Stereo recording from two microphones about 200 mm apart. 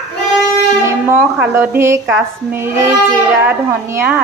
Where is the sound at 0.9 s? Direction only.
10° right (ahead or behind).